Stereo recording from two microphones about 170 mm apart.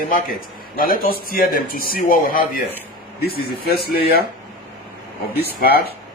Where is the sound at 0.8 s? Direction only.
60° left (ahead or behind).